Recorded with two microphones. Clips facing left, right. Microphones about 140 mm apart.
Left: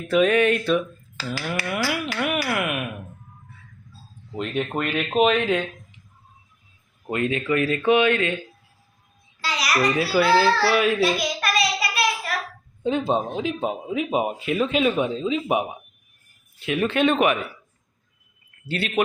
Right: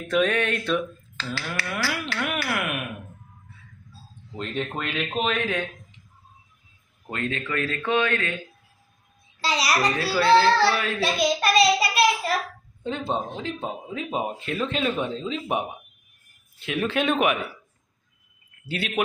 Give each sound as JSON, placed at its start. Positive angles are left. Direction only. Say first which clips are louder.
{"t": 0.1, "sound": "speech", "louder": "left 5 dB", "side_deg": 5}
{"t": 4.4, "sound": "speech", "louder": "left 4 dB", "side_deg": 10}
{"t": 7.1, "sound": "speech", "louder": "left 6 dB", "side_deg": 10}
{"t": 9.4, "sound": "babbling", "louder": "right 2 dB", "side_deg": -30}
{"t": 10.0, "sound": "speech", "louder": "right 1 dB", "side_deg": 10}
{"t": 11.0, "sound": "a sound", "louder": "even", "side_deg": -25}
{"t": 12.8, "sound": "speech", "louder": "left 5 dB", "side_deg": 15}
{"t": 18.7, "sound": "speech", "louder": "left 3 dB", "side_deg": 0}